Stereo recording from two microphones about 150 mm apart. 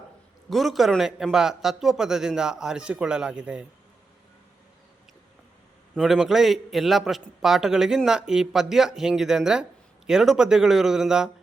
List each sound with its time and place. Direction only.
0.5 s a man's voice: centre (ahead or behind)
5.9 s a man's voice: centre (ahead or behind)